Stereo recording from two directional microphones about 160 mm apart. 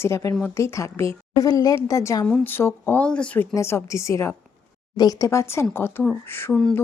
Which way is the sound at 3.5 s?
20° left (ahead or behind).